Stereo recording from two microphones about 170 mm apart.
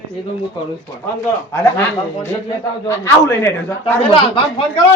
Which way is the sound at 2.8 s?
15° left (ahead or behind).